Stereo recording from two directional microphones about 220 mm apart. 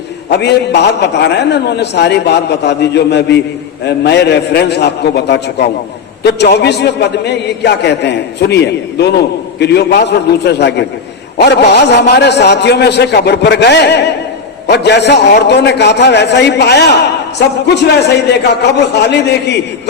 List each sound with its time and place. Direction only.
0.3 s a man's voice: 50° left (ahead or behind)
18.3 s a man's voice: 50° left (ahead or behind)